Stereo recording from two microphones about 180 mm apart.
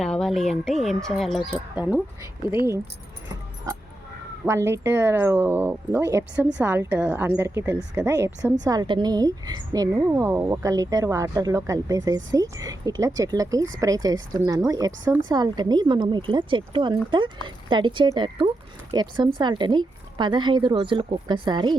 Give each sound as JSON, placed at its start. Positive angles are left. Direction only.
{"t": 0.0, "sound": "speech", "side_deg": 5}
{"t": 4.4, "sound": "a woman's voice", "side_deg": -15}